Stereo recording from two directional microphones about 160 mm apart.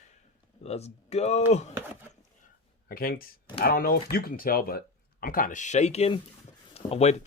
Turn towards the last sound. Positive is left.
turn(degrees=45)  # may be behind; listen again after turning